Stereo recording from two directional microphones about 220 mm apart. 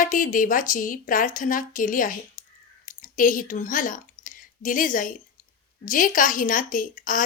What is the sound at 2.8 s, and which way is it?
Speech, 35° left (ahead or behind).